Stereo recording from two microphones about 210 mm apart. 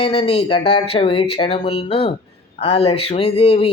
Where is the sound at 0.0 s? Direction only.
25° left (ahead or behind).